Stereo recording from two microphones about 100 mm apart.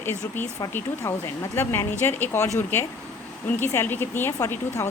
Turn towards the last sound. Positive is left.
turn(degrees=30)  # may be behind; listen again after turning